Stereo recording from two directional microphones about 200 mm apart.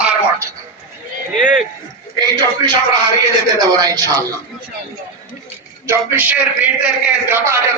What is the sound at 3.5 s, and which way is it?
Speech, 20° right (ahead or behind).